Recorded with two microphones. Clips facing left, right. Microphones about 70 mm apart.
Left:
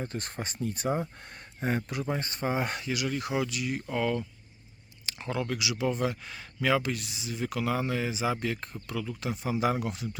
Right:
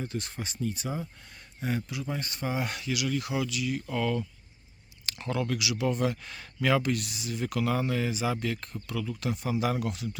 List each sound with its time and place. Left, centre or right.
0.0 s speech: left
2.0 s speech: left
3.8 s speech: centre
6.0 s speech: centre
6.9 s speech: centre